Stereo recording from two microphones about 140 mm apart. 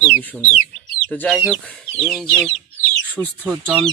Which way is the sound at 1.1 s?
5° left (ahead or behind).